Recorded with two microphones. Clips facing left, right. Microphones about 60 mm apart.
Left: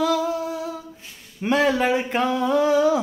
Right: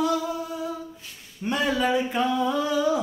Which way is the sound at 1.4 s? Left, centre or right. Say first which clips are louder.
Left 5 dB; left.